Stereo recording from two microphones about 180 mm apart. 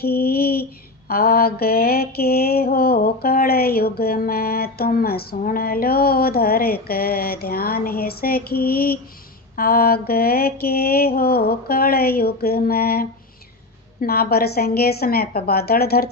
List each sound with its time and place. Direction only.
0.0 s child singing: 60° left (ahead or behind)
1.0 s mantra: 55° left (ahead or behind)